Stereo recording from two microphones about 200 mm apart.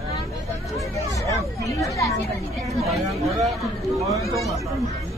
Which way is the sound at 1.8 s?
15° left (ahead or behind).